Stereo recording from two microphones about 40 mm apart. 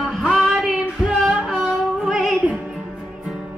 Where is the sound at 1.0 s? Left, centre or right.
Right.